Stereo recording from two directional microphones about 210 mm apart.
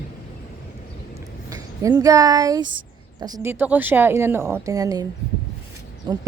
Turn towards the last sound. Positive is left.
turn(degrees=-20)  # may be behind; listen again after turning